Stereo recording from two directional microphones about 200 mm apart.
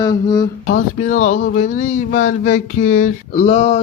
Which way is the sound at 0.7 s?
40° left (ahead or behind).